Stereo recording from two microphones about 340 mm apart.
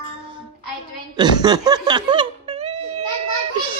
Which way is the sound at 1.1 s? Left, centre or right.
Centre.